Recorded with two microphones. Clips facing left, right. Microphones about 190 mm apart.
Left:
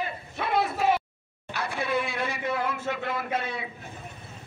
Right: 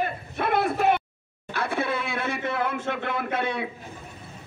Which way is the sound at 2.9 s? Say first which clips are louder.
Right 1 dB; 60° right (ahead or behind).